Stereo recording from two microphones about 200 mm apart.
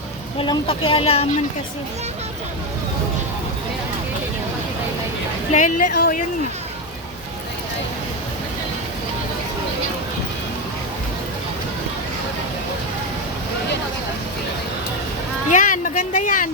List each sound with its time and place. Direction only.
0.3 s speech: 25° left (ahead or behind)
5.5 s a woman's voice: 40° left (ahead or behind)
15.4 s speech: 40° left (ahead or behind)